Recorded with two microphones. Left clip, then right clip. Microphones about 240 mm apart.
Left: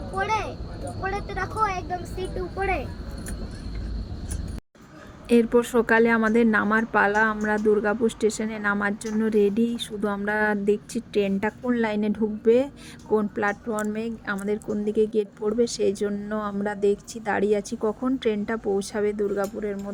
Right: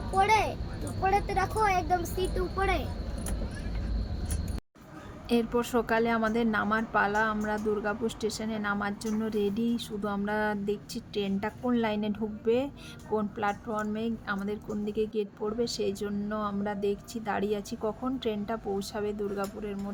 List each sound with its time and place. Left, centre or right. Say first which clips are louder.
0.2 s speech: right 2 dB; centre
5.3 s a woman's voice: left 8 dB; centre